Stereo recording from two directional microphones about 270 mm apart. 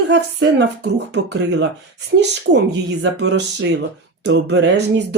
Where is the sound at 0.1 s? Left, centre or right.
Right.